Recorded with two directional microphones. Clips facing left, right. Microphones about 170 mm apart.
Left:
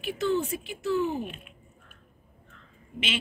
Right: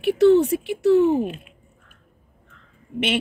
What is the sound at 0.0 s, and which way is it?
Speech, 70° right (ahead or behind).